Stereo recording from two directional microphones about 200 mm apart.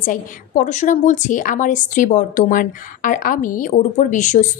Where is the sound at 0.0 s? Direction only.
40° left (ahead or behind).